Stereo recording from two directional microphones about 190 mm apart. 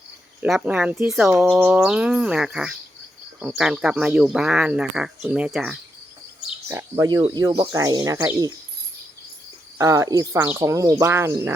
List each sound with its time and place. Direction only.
0.4 s speech: 5° right (ahead or behind)
6.7 s speech: 15° right (ahead or behind)
9.7 s speech: 15° right (ahead or behind)